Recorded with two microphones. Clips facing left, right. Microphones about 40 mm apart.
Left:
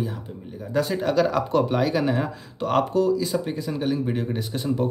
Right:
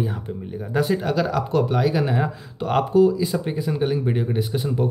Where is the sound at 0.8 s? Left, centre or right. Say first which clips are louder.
Even; centre.